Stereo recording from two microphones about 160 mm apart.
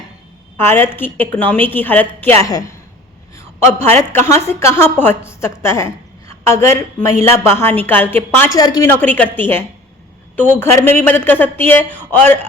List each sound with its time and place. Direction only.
0.5 s a woman's voice: 15° left (ahead or behind)
8.5 s a woman's voice: 25° left (ahead or behind)
8.9 s a woman's voice: 10° left (ahead or behind)